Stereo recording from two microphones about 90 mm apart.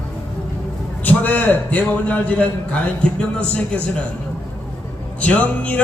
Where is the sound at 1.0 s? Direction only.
20° left (ahead or behind).